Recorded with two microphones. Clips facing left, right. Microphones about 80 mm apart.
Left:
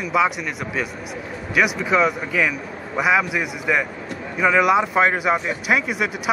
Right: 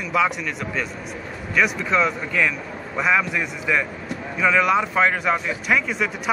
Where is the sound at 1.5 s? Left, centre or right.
Centre.